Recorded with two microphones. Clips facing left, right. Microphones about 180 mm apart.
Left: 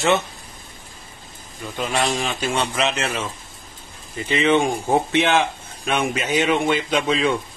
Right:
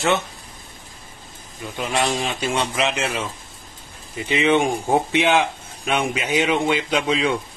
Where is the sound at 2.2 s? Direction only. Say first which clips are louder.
Even; 20° right (ahead or behind).